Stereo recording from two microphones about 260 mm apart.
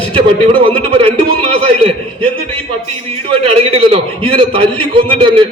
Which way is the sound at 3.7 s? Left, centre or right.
Right.